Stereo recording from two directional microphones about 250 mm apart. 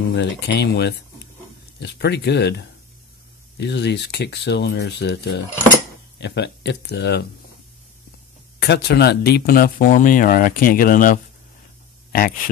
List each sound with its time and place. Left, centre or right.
0.1 s speech: left
8.5 s speech: left